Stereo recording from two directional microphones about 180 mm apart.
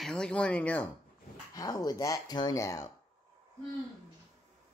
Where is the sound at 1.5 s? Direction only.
20° left (ahead or behind).